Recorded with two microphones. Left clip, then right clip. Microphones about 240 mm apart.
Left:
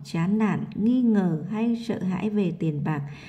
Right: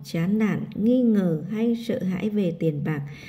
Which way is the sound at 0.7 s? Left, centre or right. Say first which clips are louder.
Right 5 dB; centre.